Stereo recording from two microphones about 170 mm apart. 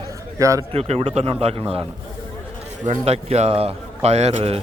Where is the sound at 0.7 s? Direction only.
35° right (ahead or behind).